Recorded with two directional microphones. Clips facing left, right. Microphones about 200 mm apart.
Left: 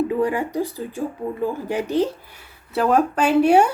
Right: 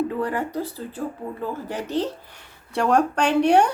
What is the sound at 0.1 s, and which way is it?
Speech, 10° left (ahead or behind).